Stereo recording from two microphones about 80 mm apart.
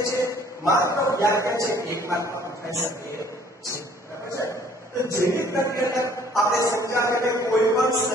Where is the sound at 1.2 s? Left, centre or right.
Left.